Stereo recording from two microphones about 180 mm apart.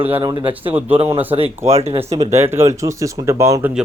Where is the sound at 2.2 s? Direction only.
15° right (ahead or behind).